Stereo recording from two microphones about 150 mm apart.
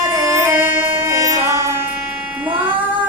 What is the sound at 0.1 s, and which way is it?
Music, 20° right (ahead or behind).